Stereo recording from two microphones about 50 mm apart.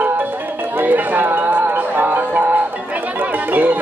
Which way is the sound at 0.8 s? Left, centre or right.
Right.